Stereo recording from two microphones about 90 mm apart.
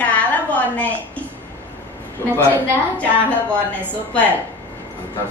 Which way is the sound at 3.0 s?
15° left (ahead or behind).